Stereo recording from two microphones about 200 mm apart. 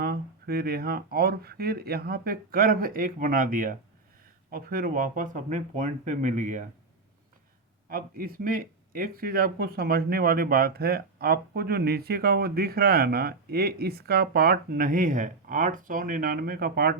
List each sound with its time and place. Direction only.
0.0 s speech: 50° right (ahead or behind)
7.9 s speech: 45° right (ahead or behind)